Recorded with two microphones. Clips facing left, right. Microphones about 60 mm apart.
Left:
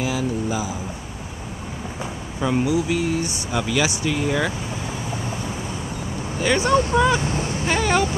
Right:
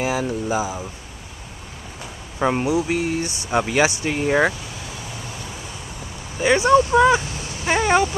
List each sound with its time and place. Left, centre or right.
0.0 s speech: right
2.4 s speech: right
6.4 s speech: centre
7.2 s a sound: left
7.6 s speech: centre